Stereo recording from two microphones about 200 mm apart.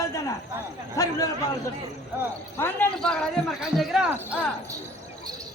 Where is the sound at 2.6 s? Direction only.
5° left (ahead or behind).